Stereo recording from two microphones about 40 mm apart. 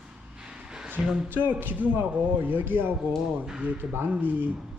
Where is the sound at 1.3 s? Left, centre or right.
Right.